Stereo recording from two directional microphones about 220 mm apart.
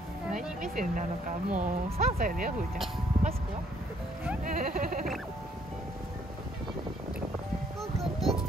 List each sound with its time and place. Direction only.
0.6 s speech: 35° right (ahead or behind)
4.5 s speech: 40° right (ahead or behind)
8.0 s music: centre (ahead or behind)